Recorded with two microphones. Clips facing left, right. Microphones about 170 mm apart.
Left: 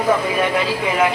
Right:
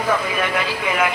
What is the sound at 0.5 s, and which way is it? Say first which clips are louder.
Speech: left 3 dB; 30° left (ahead or behind).